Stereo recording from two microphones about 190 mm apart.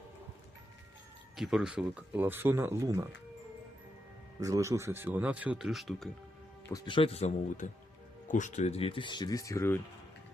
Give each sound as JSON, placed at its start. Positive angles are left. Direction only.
{"t": 1.4, "sound": "speech", "side_deg": -5}
{"t": 4.4, "sound": "speech", "side_deg": -15}
{"t": 6.7, "sound": "speech", "side_deg": 20}